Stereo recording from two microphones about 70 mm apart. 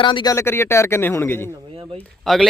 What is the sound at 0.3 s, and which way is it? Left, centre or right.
Speech, left.